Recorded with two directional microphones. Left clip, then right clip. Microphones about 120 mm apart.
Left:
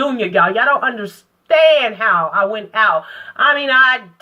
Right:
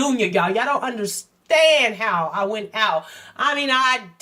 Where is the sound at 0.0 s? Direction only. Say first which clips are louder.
Left 5 dB; 30° right (ahead or behind).